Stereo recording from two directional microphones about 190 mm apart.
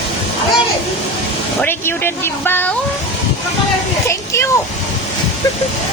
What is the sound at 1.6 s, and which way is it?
Speech, 10° left (ahead or behind).